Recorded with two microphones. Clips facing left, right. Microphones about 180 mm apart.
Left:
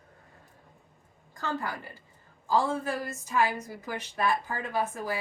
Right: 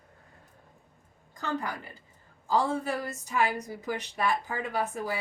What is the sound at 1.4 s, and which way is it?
A woman's voice, 20° right (ahead or behind).